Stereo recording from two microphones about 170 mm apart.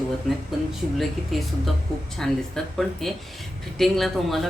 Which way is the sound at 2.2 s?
Centre (ahead or behind).